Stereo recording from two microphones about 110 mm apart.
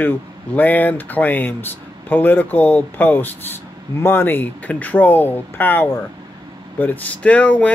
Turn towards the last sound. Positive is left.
turn(degrees=15)  # may be behind; listen again after turning